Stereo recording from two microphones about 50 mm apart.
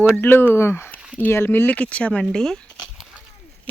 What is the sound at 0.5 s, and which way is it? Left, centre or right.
Speech, left.